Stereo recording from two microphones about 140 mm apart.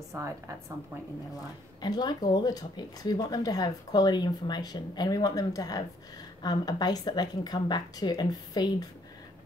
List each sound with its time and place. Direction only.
0.1 s a woman's voice: 20° right (ahead or behind)
1.8 s speech: 30° left (ahead or behind)